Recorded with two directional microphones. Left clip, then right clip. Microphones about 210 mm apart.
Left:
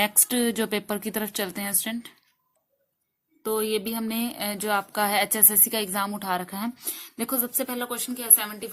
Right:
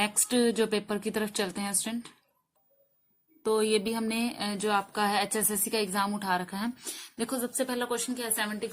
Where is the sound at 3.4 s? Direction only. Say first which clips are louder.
Even; 20° left (ahead or behind).